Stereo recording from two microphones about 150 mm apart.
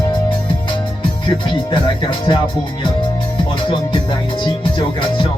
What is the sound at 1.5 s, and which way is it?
Music, 35° left (ahead or behind).